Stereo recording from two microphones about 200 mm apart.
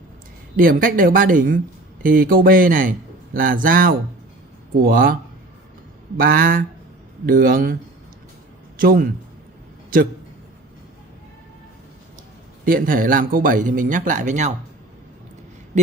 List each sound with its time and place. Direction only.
0.6 s speech: 45° right (ahead or behind)
8.7 s speech: 45° right (ahead or behind)
12.6 s speech: 45° right (ahead or behind)